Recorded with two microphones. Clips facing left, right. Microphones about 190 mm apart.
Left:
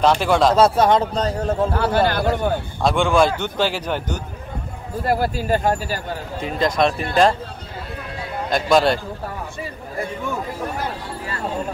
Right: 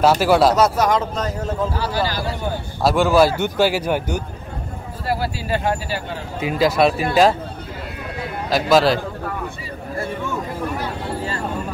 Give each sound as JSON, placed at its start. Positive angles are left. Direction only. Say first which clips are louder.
{"t": 0.0, "sound": "speech", "louder": "right 2 dB", "side_deg": -5}
{"t": 0.6, "sound": "speech", "louder": "left 2 dB", "side_deg": 30}
{"t": 1.7, "sound": "a man's voice", "louder": "left 4 dB", "side_deg": 55}
{"t": 2.8, "sound": "a man's voice", "louder": "right 2 dB", "side_deg": -5}
{"t": 5.0, "sound": "speech", "louder": "left 3 dB", "side_deg": 50}
{"t": 6.4, "sound": "speech", "louder": "right 3 dB", "side_deg": -5}
{"t": 8.5, "sound": "speech", "louder": "right 1 dB", "side_deg": -5}